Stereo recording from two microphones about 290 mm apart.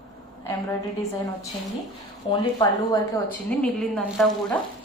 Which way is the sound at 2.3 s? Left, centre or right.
Centre.